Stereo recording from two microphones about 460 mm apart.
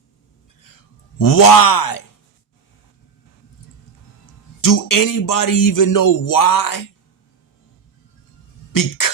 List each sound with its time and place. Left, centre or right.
1.2 s speech: left
4.6 s speech: left
8.7 s a sound: left